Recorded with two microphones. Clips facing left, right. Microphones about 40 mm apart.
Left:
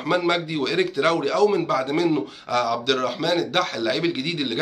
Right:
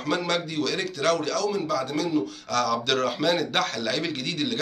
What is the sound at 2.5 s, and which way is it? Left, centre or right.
Speech, centre.